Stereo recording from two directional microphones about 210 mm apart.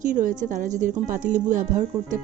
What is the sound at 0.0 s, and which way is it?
Speech, 40° right (ahead or behind).